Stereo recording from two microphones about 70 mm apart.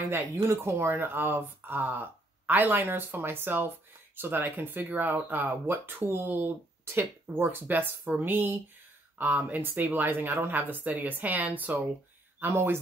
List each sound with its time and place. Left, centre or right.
0.3 s speech: right